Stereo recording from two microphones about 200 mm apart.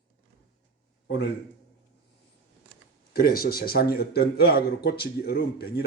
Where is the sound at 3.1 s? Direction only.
50° left (ahead or behind).